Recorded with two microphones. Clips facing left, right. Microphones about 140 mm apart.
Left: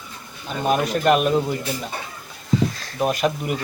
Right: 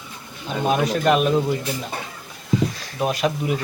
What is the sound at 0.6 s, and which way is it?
Speech, centre (ahead or behind).